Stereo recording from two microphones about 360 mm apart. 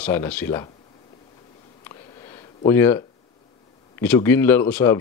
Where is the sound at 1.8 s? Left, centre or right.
Centre.